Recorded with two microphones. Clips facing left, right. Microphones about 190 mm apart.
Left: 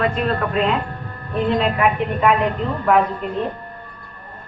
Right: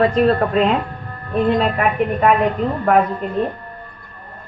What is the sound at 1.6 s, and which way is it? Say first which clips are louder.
Speech: right 1 dB; 45° right (ahead or behind).